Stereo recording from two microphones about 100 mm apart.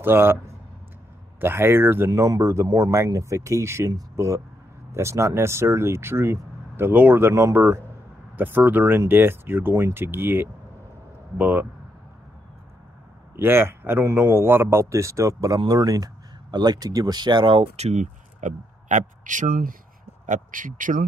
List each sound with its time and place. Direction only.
0.0 s speech: 20° right (ahead or behind)
1.4 s speech: 20° right (ahead or behind)
13.4 s a man's voice: 20° right (ahead or behind); by 17.9 s 80° right